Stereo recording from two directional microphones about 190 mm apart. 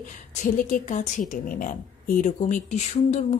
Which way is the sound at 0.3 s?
40° left (ahead or behind).